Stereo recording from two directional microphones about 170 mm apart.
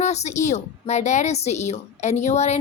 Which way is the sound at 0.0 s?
40° left (ahead or behind).